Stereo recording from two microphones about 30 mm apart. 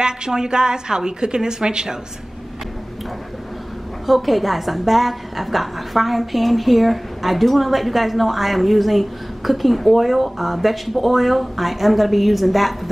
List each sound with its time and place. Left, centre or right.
0.3 s a woman's voice: right
4.0 s a woman's voice: centre